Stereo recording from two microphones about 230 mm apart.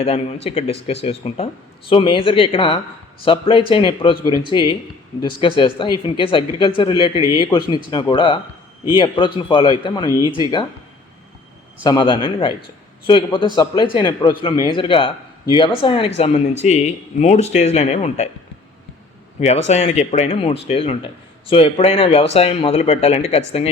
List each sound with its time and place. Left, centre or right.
0.0 s speech: left
11.8 s speech: centre
19.4 s speech: left